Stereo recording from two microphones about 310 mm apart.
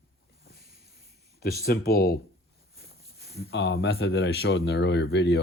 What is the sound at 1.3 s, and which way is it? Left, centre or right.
Speech, left.